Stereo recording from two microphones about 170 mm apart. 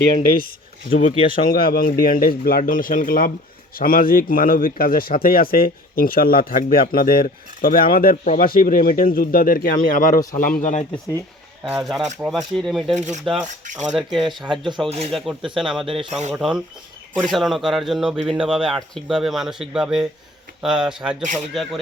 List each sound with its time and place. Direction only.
0.9 s a man's voice: 50° left (ahead or behind)
11.7 s speech: centre (ahead or behind)
12.9 s speech: 40° right (ahead or behind)
13.9 s speech: centre (ahead or behind)
14.5 s speech: 30° right (ahead or behind)
15.1 s speech: centre (ahead or behind)